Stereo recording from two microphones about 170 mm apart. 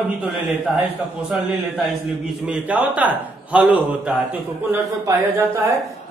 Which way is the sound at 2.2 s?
5° right (ahead or behind).